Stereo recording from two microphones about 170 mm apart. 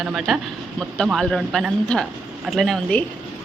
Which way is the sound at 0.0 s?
Centre (ahead or behind).